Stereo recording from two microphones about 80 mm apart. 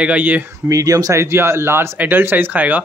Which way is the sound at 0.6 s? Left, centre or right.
Right.